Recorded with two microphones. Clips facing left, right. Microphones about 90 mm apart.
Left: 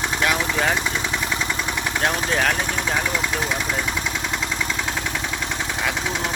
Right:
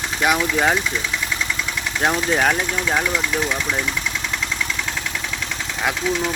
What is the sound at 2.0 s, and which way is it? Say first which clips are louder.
Speech: right 4 dB; 15° right (ahead or behind).